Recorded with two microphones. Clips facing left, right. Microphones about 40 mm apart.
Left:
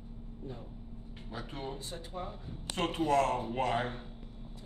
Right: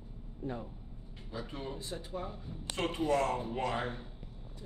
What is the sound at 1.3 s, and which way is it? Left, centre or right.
Speech, left.